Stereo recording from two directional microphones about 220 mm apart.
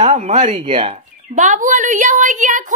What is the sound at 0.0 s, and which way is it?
Speech, 30° right (ahead or behind).